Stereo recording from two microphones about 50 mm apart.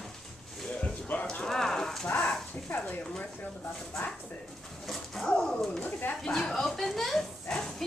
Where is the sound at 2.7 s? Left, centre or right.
Left.